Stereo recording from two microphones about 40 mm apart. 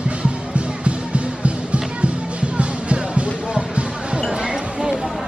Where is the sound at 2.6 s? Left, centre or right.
Right.